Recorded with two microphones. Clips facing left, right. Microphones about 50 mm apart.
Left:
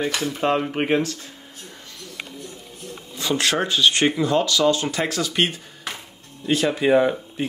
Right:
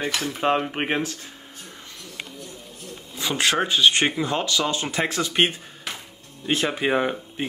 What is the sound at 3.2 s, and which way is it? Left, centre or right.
Speech, centre.